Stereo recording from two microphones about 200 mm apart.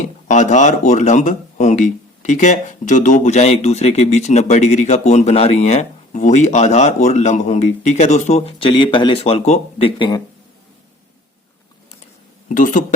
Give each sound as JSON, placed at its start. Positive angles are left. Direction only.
{"t": 0.3, "sound": "speech", "side_deg": 35}
{"t": 12.5, "sound": "speech", "side_deg": 40}